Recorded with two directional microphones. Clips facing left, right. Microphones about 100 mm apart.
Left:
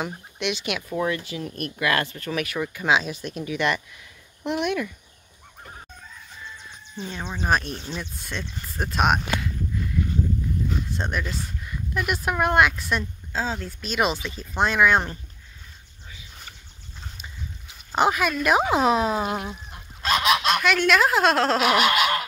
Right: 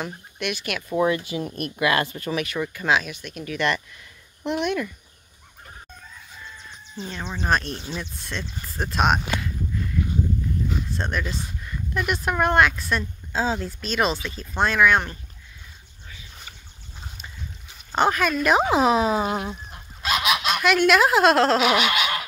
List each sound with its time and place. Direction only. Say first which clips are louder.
0.0 s speech: left 1 dB; 20° left (ahead or behind)
0.8 s speech: right 6 dB; 15° right (ahead or behind)
2.3 s speech: even; 5° left (ahead or behind)
3.0 s speech: left 3 dB; 35° left (ahead or behind)
3.4 s speech: right 1 dB; 15° left (ahead or behind)
7.0 s speech: even; 10° left (ahead or behind)
11.0 s speech: right 1 dB; 10° left (ahead or behind)
13.3 s speech: right 4 dB; 5° right (ahead or behind)
13.7 s speech: right 1 dB; 10° left (ahead or behind)
17.9 s speech: right 1 dB; 10° left (ahead or behind)
21.9 s goose: left 3 dB; 40° left (ahead or behind)